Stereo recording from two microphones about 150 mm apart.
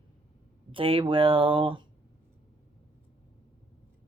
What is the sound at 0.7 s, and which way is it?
Speech, 35° right (ahead or behind).